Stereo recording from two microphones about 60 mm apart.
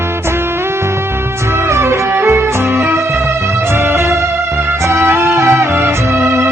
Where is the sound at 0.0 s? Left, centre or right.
Right.